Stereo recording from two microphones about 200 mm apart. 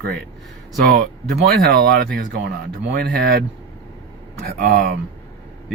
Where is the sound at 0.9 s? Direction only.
50° right (ahead or behind).